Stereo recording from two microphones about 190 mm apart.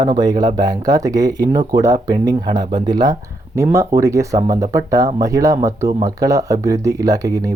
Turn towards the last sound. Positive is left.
turn(degrees=-20)  # may be behind; listen again after turning